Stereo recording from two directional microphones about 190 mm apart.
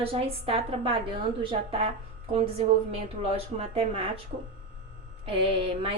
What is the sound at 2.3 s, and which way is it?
A woman's voice, 30° right (ahead or behind).